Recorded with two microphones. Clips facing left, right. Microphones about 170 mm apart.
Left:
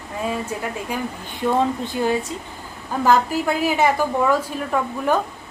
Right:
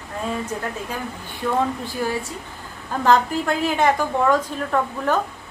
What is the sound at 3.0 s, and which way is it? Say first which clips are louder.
A woman's voice: even; 5° left (ahead or behind).